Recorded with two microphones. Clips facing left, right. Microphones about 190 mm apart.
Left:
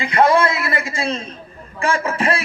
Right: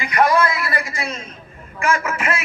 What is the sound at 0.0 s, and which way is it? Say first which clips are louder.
A man's voice: left 2 dB; 25° left (ahead or behind).